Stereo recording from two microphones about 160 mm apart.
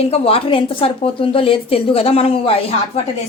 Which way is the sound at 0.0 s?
40° left (ahead or behind).